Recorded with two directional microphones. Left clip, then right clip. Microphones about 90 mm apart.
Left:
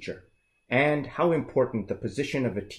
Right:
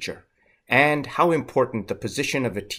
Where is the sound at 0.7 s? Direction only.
20° right (ahead or behind).